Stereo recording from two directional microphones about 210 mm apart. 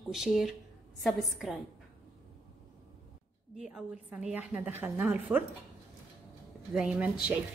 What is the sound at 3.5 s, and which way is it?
A woman's voice, centre (ahead or behind).